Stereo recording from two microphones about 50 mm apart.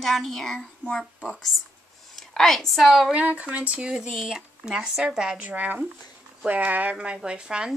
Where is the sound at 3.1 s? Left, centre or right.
Right.